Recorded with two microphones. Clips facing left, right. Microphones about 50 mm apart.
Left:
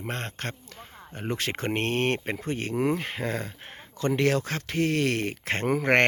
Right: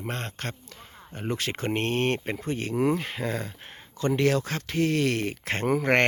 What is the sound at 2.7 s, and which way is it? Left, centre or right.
Speech, left.